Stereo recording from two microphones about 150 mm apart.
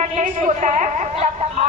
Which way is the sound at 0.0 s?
55° right (ahead or behind).